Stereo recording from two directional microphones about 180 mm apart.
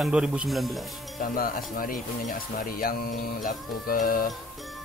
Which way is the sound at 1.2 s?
50° left (ahead or behind).